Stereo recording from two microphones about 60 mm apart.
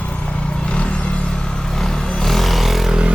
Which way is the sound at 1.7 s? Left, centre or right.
Centre.